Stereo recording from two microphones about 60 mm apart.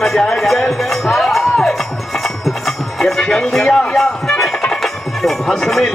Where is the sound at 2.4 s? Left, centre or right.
Centre.